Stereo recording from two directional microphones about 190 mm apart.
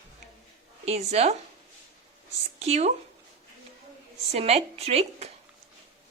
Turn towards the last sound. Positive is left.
turn(degrees=-35)  # may be behind; listen again after turning